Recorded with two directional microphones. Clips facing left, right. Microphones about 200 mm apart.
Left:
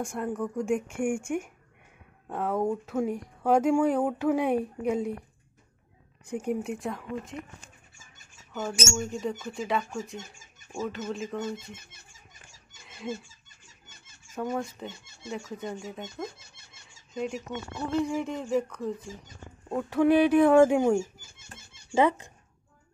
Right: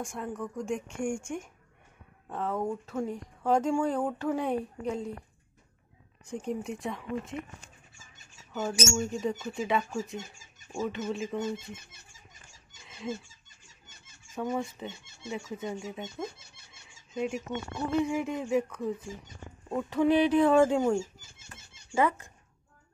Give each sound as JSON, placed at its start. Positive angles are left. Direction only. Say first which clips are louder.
{"t": 0.0, "sound": "a woman's voice", "louder": "left 5 dB", "side_deg": 0}
{"t": 6.3, "sound": "speech", "louder": "left 4 dB", "side_deg": 5}
{"t": 8.9, "sound": "speech", "louder": "right 1 dB", "side_deg": 0}
{"t": 12.8, "sound": "a sound", "louder": "left 1 dB", "side_deg": 5}
{"t": 14.3, "sound": "speech", "louder": "left 1 dB", "side_deg": 0}
{"t": 19.7, "sound": "a woman's voice", "louder": "left 3 dB", "side_deg": 10}